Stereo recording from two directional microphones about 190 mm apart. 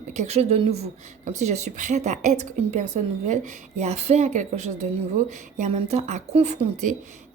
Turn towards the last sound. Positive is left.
turn(degrees=-35)  # may be behind; listen again after turning